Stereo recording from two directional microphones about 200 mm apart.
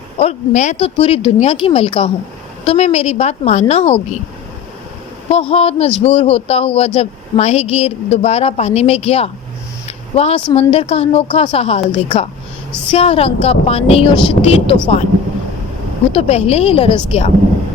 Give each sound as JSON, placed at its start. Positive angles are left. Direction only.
{"t": 0.2, "sound": "speech", "side_deg": 35}
{"t": 5.3, "sound": "speech", "side_deg": 30}
{"t": 9.8, "sound": "a sound", "side_deg": 30}
{"t": 10.5, "sound": "speech", "side_deg": 30}
{"t": 16.1, "sound": "speech", "side_deg": 30}